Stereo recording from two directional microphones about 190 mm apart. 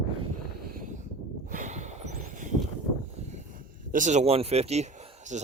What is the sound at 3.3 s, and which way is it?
Speech, 45° right (ahead or behind).